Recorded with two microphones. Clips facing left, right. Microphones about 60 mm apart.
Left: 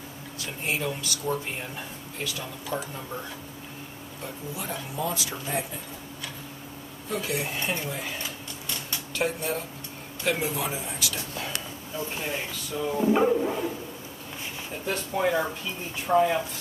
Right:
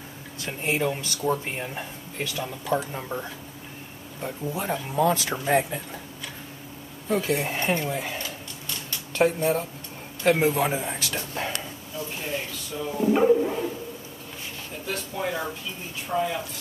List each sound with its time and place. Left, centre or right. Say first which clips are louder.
0.4 s a man's voice: right 4 dB; right
4.2 s speech: right 6 dB; right
7.2 s a man's voice: right 4 dB; right
9.1 s a man's voice: right 7 dB; right
12.0 s speech: even; centre
12.7 s speech: even; centre
14.9 s speech: left 4 dB; centre